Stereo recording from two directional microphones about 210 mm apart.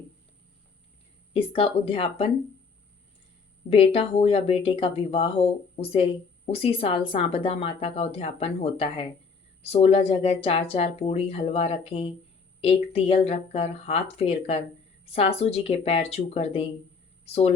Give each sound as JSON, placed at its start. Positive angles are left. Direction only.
{"t": 1.3, "sound": "speech", "side_deg": 25}
{"t": 3.7, "sound": "speech", "side_deg": 25}